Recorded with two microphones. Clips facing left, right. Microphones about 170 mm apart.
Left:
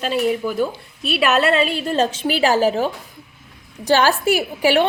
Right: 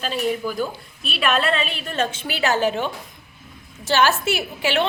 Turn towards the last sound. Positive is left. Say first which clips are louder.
# left 6 dB
turn(degrees=15)  # may be behind; listen again after turning